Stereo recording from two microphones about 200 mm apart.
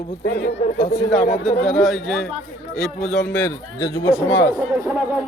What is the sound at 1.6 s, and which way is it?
Speech, centre (ahead or behind).